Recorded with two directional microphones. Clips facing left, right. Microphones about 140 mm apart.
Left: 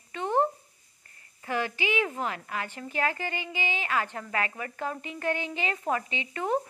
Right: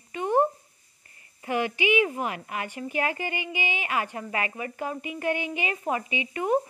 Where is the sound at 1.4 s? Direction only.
15° right (ahead or behind).